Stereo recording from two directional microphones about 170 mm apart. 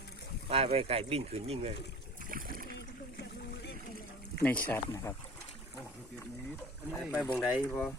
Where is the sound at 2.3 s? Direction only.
55° right (ahead or behind).